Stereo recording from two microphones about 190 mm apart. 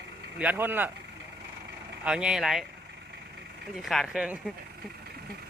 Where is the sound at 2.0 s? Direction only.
5° right (ahead or behind).